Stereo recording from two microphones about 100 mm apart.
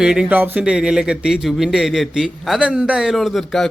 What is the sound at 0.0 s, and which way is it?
Speech, 10° right (ahead or behind).